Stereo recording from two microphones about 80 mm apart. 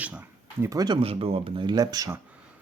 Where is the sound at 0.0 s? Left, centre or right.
Centre.